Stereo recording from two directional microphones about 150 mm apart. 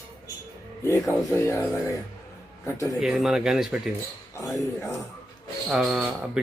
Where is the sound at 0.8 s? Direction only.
20° left (ahead or behind).